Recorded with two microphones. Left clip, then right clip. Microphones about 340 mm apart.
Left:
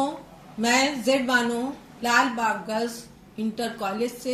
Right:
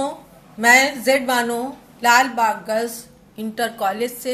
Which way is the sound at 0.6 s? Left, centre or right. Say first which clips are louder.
Right 9 dB; right.